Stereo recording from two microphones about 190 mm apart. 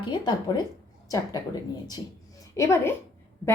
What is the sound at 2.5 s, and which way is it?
Speech, 15° left (ahead or behind).